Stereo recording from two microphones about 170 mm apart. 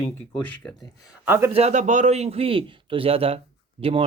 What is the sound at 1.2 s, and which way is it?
Speech, 10° right (ahead or behind).